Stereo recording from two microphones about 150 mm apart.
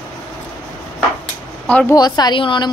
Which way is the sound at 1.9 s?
30° left (ahead or behind).